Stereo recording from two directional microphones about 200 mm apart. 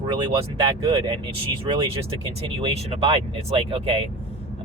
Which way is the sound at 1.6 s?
25° right (ahead or behind).